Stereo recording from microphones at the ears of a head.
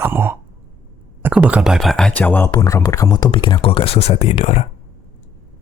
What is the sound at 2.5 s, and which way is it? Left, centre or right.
Speech, left.